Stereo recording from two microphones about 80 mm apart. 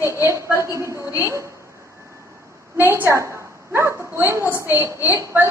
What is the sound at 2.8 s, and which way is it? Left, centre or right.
Speech, right.